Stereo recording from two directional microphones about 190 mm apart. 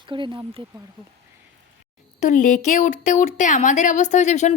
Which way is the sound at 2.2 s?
40° left (ahead or behind).